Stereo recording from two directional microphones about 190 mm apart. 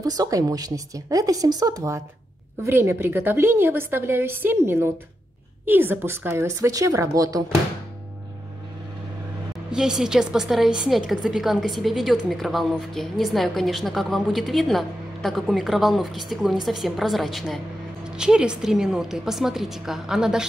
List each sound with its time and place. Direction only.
0.0 s a woman's voice: 20° right (ahead or behind)
9.7 s a woman's voice: 5° right (ahead or behind)